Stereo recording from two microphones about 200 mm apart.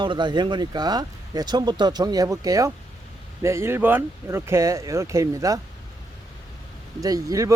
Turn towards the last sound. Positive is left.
turn(degrees=-15)  # may be behind; listen again after turning